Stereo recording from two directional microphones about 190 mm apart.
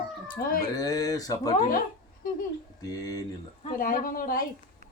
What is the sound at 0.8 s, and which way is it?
Speech, 20° left (ahead or behind).